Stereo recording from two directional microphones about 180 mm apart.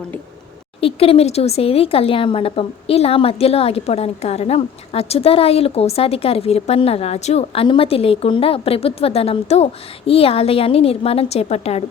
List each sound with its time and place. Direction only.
0.8 s speech: 30° left (ahead or behind)